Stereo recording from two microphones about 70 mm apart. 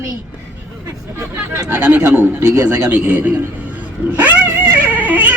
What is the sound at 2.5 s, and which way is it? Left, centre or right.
Speech, right.